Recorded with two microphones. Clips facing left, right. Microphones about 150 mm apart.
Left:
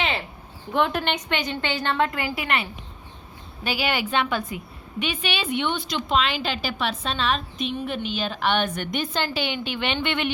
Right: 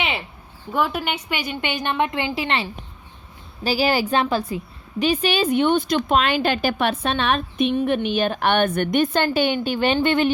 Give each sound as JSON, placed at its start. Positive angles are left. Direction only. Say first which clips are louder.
{"t": 0.7, "sound": "a woman's voice", "louder": "even", "side_deg": -5}